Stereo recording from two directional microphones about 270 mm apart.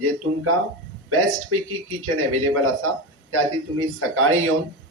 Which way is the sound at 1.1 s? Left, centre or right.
Right.